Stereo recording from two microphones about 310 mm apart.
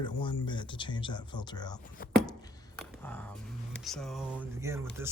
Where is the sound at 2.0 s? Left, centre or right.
Left.